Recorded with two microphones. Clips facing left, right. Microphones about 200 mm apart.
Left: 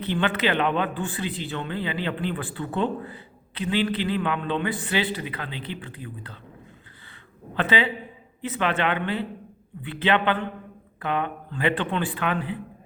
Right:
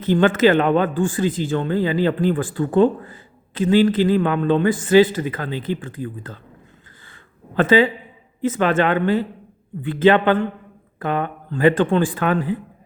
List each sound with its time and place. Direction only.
0.0 s speech: 45° right (ahead or behind)
7.5 s speech: 45° right (ahead or behind)